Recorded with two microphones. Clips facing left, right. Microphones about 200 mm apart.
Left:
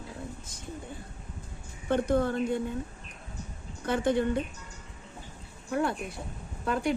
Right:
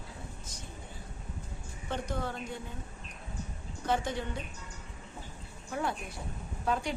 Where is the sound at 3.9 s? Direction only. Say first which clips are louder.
Left 6 dB; 55° left (ahead or behind).